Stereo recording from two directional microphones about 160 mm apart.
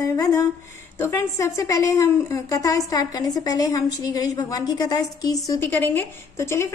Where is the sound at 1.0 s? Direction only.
15° left (ahead or behind).